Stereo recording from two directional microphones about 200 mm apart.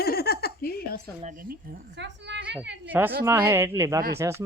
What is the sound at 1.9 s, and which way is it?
Speech, 60° right (ahead or behind).